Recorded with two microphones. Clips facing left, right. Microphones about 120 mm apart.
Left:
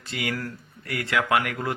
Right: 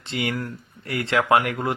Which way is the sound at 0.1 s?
30° right (ahead or behind).